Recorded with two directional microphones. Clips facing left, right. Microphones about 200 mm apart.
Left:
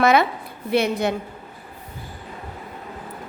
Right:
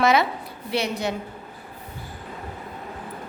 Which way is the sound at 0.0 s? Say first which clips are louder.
Left 2 dB; 55° left (ahead or behind).